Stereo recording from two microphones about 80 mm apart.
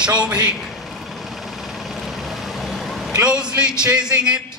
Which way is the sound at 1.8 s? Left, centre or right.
Centre.